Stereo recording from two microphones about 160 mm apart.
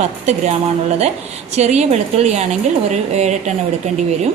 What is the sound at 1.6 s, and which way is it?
A woman's voice, 45° right (ahead or behind).